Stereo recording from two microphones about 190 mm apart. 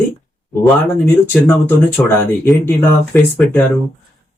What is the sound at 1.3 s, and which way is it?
A man's voice, 10° left (ahead or behind).